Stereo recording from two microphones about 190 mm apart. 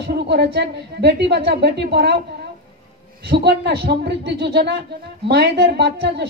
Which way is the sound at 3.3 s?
60° right (ahead or behind).